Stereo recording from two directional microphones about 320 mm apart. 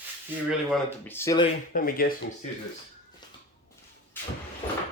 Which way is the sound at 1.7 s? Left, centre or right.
Left.